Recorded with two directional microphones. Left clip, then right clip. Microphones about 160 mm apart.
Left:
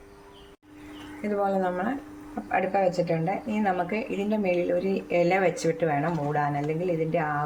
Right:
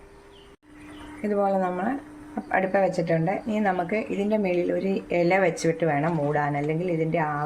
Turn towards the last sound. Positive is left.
turn(degrees=-10)  # may be behind; listen again after turning